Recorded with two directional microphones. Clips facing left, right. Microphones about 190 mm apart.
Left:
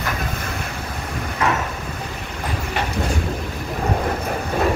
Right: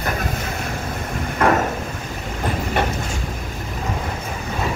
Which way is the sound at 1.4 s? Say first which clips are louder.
Right 4 dB; 55° right (ahead or behind).